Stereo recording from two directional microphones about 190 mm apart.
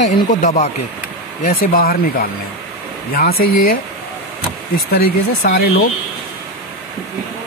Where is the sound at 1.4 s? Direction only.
50° left (ahead or behind).